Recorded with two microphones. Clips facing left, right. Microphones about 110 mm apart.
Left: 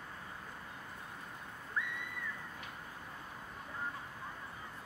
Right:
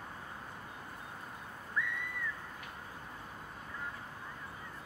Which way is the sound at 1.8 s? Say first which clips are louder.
Right 2 dB; 25° left (ahead or behind).